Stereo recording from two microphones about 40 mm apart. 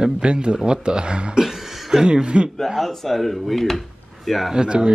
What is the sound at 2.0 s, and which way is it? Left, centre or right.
Speech, right.